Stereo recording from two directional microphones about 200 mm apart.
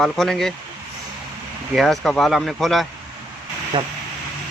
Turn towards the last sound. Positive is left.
turn(degrees=-25)  # may be behind; listen again after turning